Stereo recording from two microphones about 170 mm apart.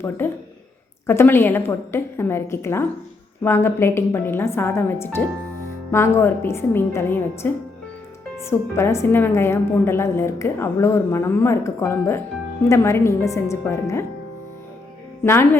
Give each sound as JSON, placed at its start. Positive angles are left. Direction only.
{"t": 0.2, "sound": "a woman's voice", "side_deg": 10}
{"t": 15.2, "sound": "speech", "side_deg": 15}